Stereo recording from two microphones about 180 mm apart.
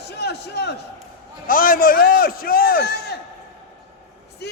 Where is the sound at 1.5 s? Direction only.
50° left (ahead or behind).